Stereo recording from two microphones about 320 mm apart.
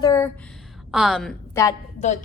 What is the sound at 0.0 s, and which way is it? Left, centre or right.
Speech, centre.